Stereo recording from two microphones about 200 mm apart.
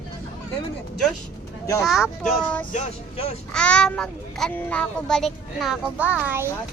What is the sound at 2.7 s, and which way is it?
Speech, 30° left (ahead or behind).